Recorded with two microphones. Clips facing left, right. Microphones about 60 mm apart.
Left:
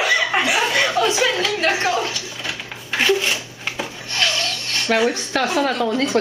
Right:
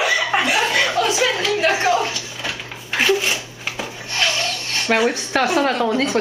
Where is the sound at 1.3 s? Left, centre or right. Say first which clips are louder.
Right 1 dB; centre.